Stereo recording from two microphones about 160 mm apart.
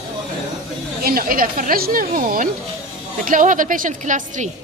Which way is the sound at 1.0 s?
65° right (ahead or behind).